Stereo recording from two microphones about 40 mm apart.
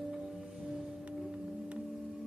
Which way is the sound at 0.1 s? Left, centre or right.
Centre.